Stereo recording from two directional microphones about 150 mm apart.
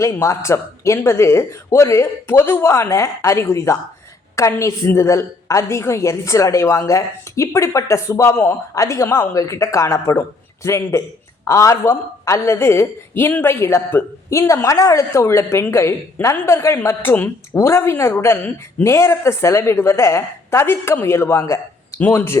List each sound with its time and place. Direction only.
0.0 s a woman's voice: 20° left (ahead or behind)